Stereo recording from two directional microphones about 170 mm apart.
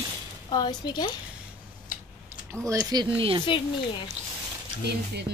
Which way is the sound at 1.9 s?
55° left (ahead or behind).